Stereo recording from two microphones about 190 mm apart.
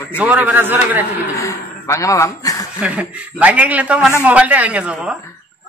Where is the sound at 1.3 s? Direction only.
15° left (ahead or behind).